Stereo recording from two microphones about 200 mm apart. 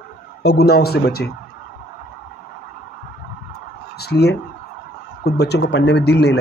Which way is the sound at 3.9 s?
55° left (ahead or behind).